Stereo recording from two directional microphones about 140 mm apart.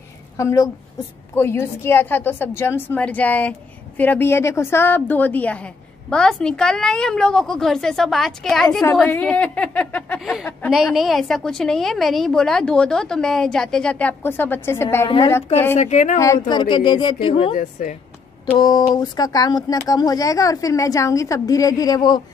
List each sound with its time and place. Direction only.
0.4 s a woman's voice: 20° left (ahead or behind)
10.7 s a woman's voice: centre (ahead or behind); by 15.8 s 15° left (ahead or behind)
15.8 s speech: 60° left (ahead or behind)
16.2 s speech: 25° left (ahead or behind); by 17.6 s 40° left (ahead or behind)
17.6 s speech: 65° left (ahead or behind)
18.4 s speech: 30° left (ahead or behind)